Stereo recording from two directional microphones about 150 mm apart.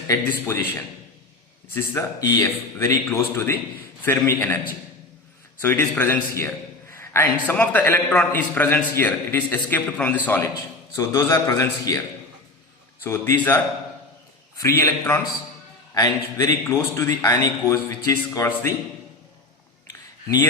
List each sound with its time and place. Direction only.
0.1 s a man's voice: 15° left (ahead or behind)
6.9 s a sound: 15° left (ahead or behind)
7.5 s a man's voice: 10° left (ahead or behind)
13.0 s a man's voice: 15° left (ahead or behind)
14.6 s a man's voice: 20° left (ahead or behind)